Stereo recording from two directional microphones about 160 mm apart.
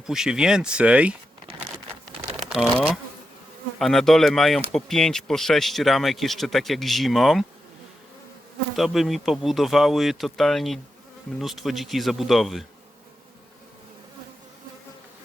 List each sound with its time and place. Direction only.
0.1 s speech: 5° right (ahead or behind)
2.5 s speech: centre (ahead or behind)
8.7 s speech: centre (ahead or behind)